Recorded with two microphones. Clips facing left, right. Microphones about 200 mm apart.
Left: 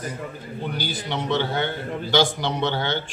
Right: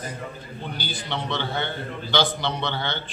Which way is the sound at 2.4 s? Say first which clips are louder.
Left 3 dB; 45° left (ahead or behind).